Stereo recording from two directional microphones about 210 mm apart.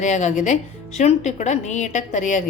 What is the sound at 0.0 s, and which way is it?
Speech, 35° left (ahead or behind).